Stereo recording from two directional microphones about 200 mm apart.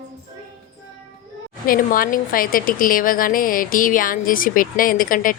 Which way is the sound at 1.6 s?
45° left (ahead or behind).